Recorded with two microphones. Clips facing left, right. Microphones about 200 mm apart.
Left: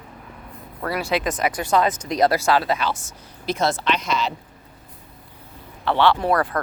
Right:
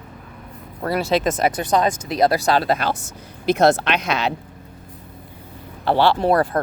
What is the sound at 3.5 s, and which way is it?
Speech, 60° right (ahead or behind).